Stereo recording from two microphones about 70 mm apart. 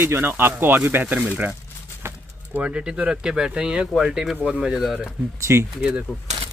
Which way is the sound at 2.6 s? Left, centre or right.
Centre.